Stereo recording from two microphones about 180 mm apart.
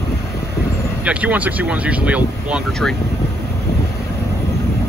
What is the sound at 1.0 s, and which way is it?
Speech, 5° right (ahead or behind).